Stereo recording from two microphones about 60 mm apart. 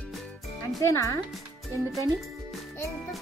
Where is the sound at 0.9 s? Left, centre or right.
Left.